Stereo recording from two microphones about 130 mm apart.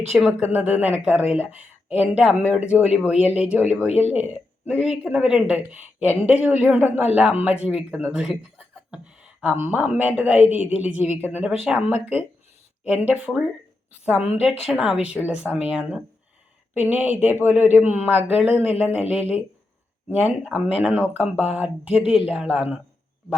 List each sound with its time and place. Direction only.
0.3 s speech: 10° right (ahead or behind)
3.8 s speech: 55° left (ahead or behind)
4.1 s speech: 10° right (ahead or behind)
20.1 s speech: 10° right (ahead or behind)